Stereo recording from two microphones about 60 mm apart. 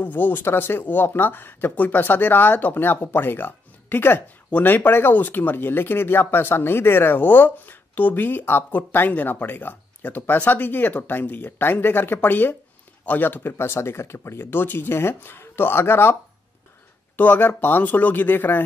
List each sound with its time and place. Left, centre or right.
0.0 s speech: left
17.2 s speech: left